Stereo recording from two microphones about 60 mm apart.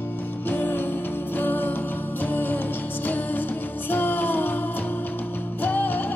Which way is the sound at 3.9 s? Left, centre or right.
Left.